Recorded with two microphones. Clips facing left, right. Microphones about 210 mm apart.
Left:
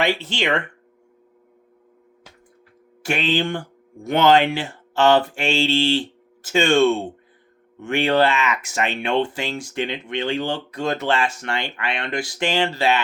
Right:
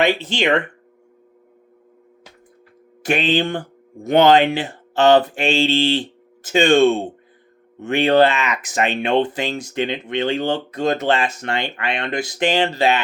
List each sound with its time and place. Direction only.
0.0 s speech: 20° right (ahead or behind)
3.0 s speech: 20° right (ahead or behind)